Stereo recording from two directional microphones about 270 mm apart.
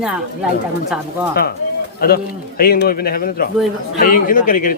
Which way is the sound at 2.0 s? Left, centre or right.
Left.